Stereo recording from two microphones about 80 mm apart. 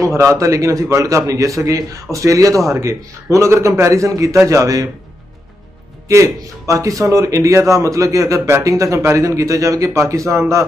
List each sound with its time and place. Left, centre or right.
0.0 s a man's voice: right
6.0 s a man's voice: right